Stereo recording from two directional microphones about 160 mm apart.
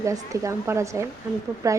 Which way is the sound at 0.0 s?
20° right (ahead or behind).